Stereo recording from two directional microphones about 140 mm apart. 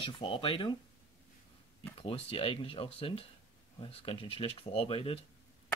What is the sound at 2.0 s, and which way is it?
Speech, 40° left (ahead or behind).